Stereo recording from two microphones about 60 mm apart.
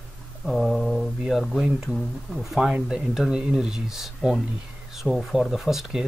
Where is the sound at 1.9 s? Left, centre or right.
Centre.